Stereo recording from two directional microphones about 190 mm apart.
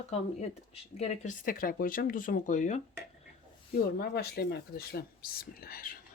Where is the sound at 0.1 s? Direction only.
35° left (ahead or behind).